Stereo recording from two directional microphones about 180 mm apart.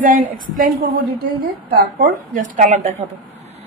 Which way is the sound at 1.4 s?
60° right (ahead or behind).